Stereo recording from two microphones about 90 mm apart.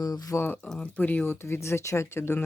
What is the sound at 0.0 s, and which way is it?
Speech, 45° left (ahead or behind).